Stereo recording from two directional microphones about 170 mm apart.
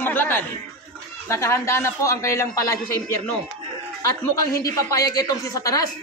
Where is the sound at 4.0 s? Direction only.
20° left (ahead or behind).